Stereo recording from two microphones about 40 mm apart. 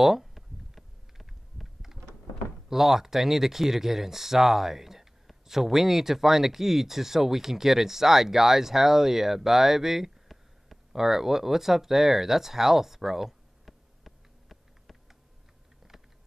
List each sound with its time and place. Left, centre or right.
0.0 s computer keyboard: centre
2.7 s speech: centre
15.8 s typing: centre